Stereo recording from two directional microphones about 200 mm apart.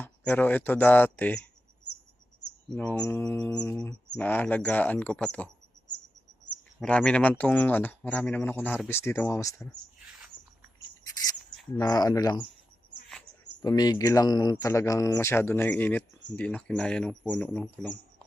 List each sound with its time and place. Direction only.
0.0 s speech: 10° left (ahead or behind)
2.7 s speech: 5° left (ahead or behind)
6.7 s speech: 5° left (ahead or behind)
11.8 s speech: 20° left (ahead or behind)
13.6 s speech: 20° left (ahead or behind)